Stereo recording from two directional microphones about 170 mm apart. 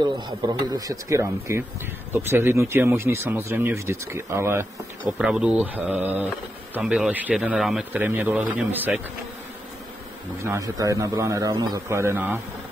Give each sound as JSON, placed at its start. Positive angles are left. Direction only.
{"t": 0.0, "sound": "a man's voice", "side_deg": -25}
{"t": 5.2, "sound": "speech", "side_deg": -5}
{"t": 10.4, "sound": "a man's voice", "side_deg": -15}